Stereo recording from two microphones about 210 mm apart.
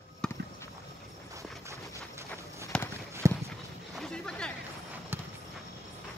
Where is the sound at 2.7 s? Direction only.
5° left (ahead or behind).